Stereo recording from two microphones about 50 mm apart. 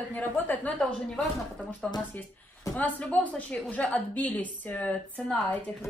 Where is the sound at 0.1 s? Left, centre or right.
Left.